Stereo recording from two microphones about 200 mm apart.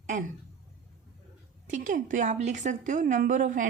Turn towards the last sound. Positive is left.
turn(degrees=-40)  # may be behind; listen again after turning